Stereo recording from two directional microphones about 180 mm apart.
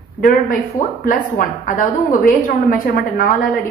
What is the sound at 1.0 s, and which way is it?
A woman's voice, 50° left (ahead or behind).